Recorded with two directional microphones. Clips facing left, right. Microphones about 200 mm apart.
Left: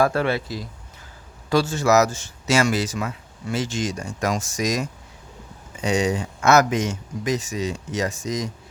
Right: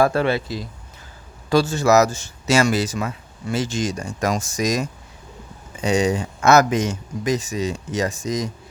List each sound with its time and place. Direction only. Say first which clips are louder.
0.0 s speech: right 2 dB; 30° right (ahead or behind)
1.5 s speech: right 2 dB; 35° right (ahead or behind)